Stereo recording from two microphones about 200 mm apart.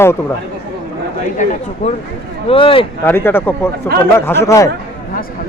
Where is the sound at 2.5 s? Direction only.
25° left (ahead or behind).